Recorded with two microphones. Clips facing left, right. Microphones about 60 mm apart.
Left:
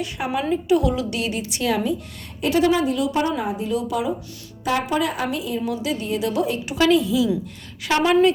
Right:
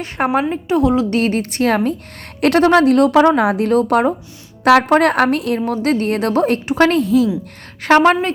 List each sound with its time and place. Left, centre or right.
0.2 s a woman's voice: right
0.5 s a woman's voice: right
2.4 s a woman's voice: right
4.6 s a woman's voice: right